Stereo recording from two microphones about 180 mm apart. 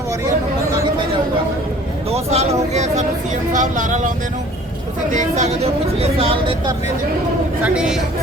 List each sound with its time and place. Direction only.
2.0 s speech: 35° right (ahead or behind)
5.1 s speech: 40° right (ahead or behind)
7.6 s a woman's voice: 5° right (ahead or behind)